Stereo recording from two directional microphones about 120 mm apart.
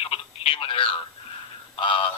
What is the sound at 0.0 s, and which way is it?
Telephone, 55° left (ahead or behind).